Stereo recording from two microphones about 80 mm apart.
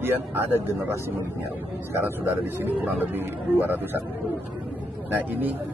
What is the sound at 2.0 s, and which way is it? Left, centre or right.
A man's voice, right.